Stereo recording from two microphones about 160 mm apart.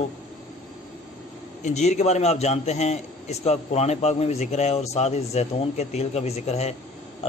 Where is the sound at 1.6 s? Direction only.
45° left (ahead or behind).